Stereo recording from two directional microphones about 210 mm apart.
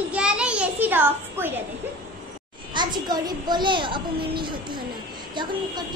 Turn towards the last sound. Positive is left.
turn(degrees=-20)  # may be behind; listen again after turning